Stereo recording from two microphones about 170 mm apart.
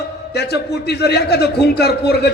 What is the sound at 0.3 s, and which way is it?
A man's voice, 75° left (ahead or behind).